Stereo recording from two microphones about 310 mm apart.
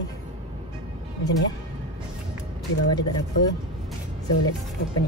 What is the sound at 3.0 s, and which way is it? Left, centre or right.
Speech, left.